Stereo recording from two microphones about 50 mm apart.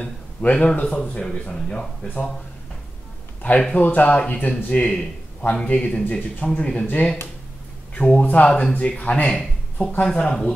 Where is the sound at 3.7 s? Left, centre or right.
Left.